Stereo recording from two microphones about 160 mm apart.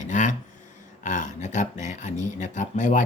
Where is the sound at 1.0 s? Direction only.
50° left (ahead or behind).